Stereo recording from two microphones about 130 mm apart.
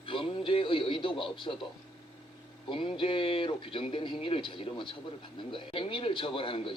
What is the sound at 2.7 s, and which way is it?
Speech, 40° left (ahead or behind).